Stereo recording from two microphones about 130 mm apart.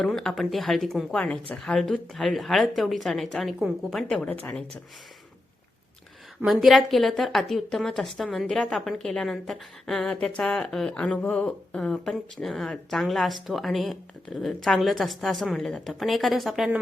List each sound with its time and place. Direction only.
0.0 s a woman's voice: 5° left (ahead or behind)
6.4 s a woman's voice: centre (ahead or behind)